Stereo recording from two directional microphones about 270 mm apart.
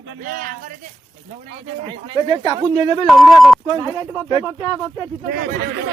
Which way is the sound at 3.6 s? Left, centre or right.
Centre.